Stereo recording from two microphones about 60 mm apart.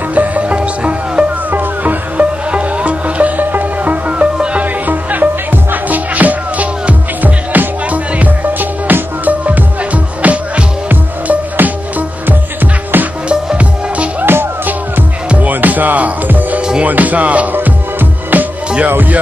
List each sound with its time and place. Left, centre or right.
0.1 s music: right
1.5 s music: right
12.9 s music: right
13.3 s music: centre
14.2 s music: right
15.2 s music: right